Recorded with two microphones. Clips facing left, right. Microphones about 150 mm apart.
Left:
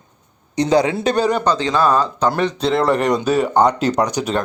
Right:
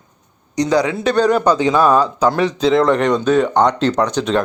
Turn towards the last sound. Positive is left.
turn(degrees=10)  # may be behind; listen again after turning